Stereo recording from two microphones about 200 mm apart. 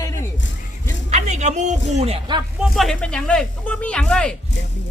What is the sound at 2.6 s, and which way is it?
Speech, centre (ahead or behind).